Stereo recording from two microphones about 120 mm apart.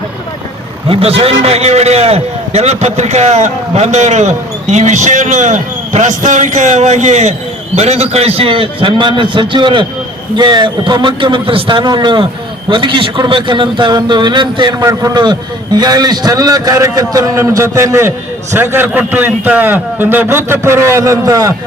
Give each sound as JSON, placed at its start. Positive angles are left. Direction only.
{"t": 0.9, "sound": "a man's voice", "side_deg": -50}